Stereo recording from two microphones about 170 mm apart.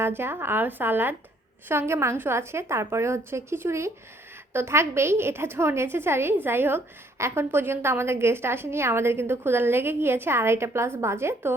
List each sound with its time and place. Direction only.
0.0 s a woman's voice: 15° right (ahead or behind)